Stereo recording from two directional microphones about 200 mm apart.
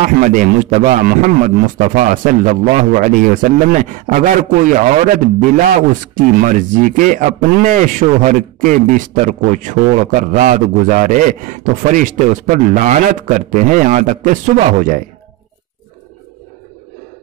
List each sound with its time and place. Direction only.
0.0 s a man's voice: 40° right (ahead or behind)
6.1 s a man's voice: 40° right (ahead or behind)